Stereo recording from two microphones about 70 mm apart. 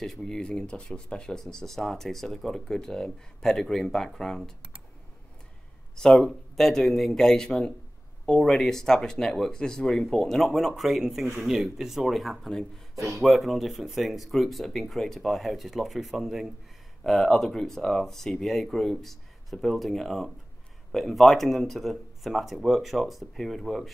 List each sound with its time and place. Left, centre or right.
0.0 s speech: centre
5.9 s speech: centre
12.9 s speech: right
13.2 s speech: centre